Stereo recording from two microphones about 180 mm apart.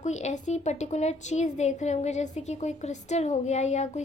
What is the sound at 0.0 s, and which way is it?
A woman's voice, 40° left (ahead or behind).